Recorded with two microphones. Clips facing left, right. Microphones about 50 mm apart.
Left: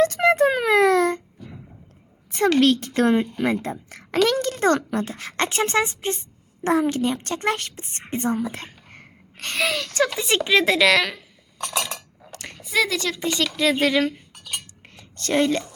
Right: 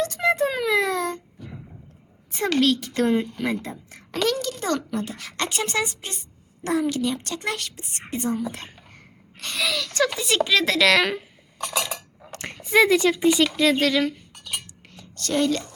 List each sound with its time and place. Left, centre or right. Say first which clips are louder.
0.0 s a sound: left 5 dB; left
2.8 s speech: left 2 dB; left
3.8 s a child's voice: left 4 dB; left
10.8 s a woman's voice: right 2 dB; centre
11.5 s cutlery: even; centre
12.3 s speech: right 5 dB; right; by 13.6 s centre
13.6 s a woman's voice: right 1 dB; centre
13.8 s speech: left 1 dB; centre
14.3 s cutlery: even; centre
15.1 s speech: left 2 dB; left